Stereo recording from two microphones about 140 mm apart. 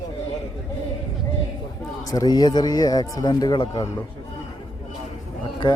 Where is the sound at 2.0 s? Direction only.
25° left (ahead or behind).